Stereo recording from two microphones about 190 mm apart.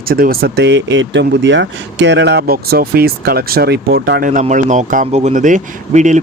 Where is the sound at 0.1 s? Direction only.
50° right (ahead or behind).